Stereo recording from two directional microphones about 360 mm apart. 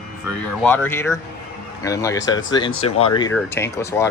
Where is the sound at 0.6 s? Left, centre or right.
Centre.